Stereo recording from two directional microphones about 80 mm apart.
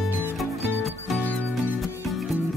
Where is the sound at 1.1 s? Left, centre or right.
Left.